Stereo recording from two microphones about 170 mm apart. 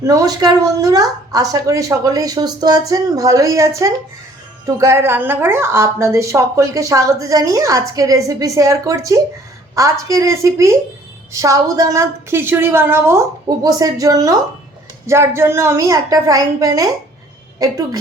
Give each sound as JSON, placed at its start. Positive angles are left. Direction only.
{"t": 0.0, "sound": "a woman's voice", "side_deg": -20}